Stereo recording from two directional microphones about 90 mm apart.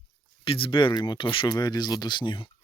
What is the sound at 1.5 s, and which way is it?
Speech, 50° left (ahead or behind).